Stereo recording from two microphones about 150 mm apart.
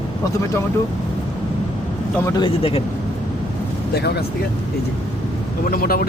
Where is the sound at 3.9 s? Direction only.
90° left.